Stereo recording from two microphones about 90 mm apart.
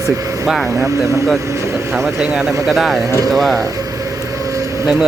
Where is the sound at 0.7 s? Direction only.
35° right (ahead or behind).